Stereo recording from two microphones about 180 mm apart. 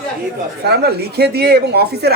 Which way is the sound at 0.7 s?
65° right (ahead or behind).